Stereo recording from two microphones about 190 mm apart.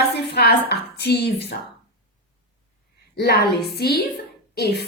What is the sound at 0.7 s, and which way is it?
Speech, 60° left (ahead or behind).